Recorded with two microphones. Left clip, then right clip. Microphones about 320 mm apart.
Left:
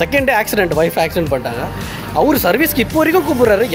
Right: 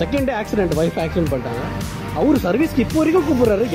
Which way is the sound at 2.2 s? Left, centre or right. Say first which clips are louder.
Left 5 dB; left.